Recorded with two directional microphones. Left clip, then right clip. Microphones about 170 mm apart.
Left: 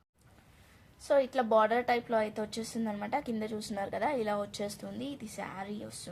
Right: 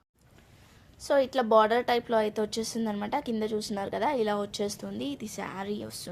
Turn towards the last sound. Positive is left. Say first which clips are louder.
# right 6 dB
turn(degrees=-50)  # may be behind; listen again after turning